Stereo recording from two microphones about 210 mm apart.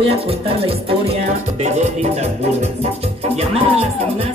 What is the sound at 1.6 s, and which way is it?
Music, 30° right (ahead or behind).